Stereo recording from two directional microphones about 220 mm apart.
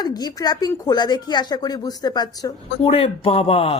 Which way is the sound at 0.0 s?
20° left (ahead or behind).